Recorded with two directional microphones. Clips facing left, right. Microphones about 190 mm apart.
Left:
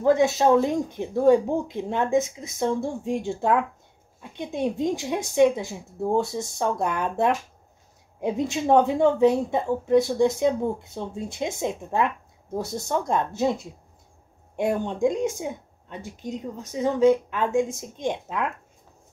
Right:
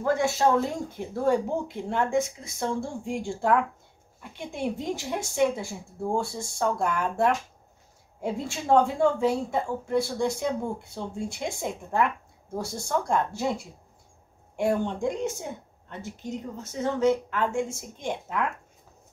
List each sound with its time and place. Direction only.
0.0 s speech: 20° left (ahead or behind)